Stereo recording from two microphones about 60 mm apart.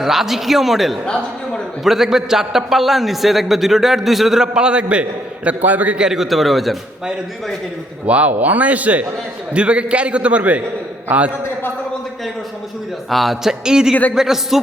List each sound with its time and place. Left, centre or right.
0.0 s a man's voice: centre; by 6.0 s right
6.0 s a man's voice: centre
8.0 s a man's voice: right
13.1 s speech: centre